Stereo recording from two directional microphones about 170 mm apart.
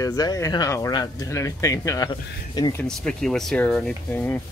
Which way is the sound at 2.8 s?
5° left (ahead or behind).